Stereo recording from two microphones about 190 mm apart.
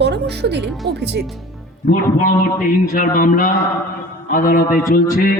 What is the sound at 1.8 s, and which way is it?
A man's voice, 45° left (ahead or behind).